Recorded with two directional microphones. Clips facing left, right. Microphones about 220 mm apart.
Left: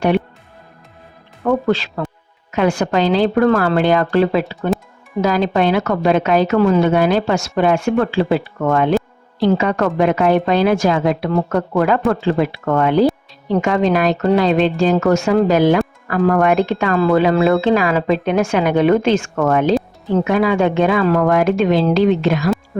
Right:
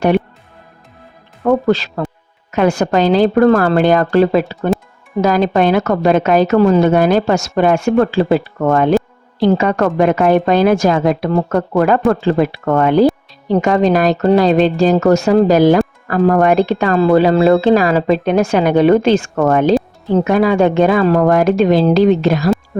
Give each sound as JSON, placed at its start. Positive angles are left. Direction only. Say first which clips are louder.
{"t": 1.5, "sound": "a woman's voice", "louder": "right 3 dB", "side_deg": -40}